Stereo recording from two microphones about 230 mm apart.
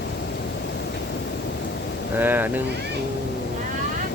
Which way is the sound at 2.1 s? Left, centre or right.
Centre.